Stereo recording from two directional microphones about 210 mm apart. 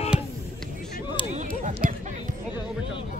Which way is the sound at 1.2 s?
25° left (ahead or behind).